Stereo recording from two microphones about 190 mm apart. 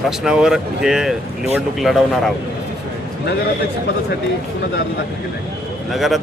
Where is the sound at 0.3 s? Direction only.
5° right (ahead or behind).